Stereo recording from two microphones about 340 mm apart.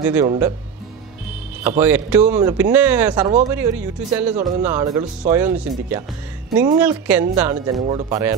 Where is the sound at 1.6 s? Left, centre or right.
Centre.